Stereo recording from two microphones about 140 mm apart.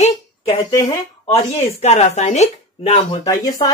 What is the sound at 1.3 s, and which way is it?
Speech, 45° left (ahead or behind).